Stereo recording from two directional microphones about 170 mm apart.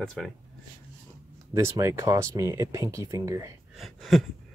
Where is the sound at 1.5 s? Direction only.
15° right (ahead or behind).